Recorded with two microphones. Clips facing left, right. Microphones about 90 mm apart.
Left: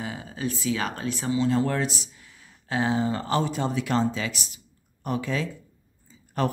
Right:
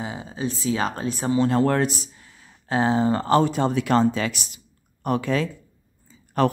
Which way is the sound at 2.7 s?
35° right (ahead or behind).